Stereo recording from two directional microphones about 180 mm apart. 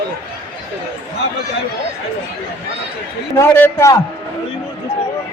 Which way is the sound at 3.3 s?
15° left (ahead or behind).